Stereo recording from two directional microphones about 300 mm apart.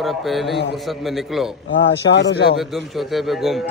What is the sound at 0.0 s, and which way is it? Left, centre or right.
A man's voice, centre.